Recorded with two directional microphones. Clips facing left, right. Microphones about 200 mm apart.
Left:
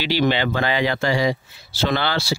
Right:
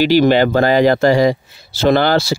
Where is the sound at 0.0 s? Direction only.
45° right (ahead or behind).